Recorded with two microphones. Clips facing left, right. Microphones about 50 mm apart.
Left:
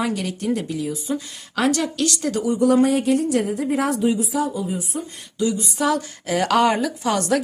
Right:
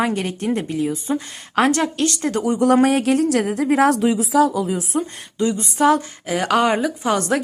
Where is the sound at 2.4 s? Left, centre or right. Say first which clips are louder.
Right 1 dB; right.